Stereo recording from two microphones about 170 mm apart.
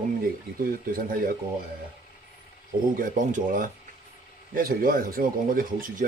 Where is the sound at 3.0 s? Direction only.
50° right (ahead or behind).